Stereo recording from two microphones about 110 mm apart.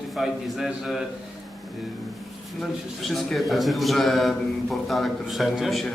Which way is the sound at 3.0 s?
Centre (ahead or behind).